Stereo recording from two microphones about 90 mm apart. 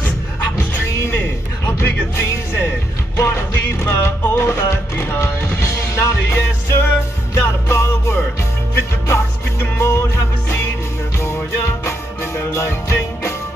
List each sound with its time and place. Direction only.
0.8 s music: 30° left (ahead or behind)
1.8 s speech: 30° left (ahead or behind)
3.2 s music: 30° left (ahead or behind)